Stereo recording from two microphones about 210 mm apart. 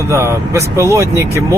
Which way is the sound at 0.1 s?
15° right (ahead or behind).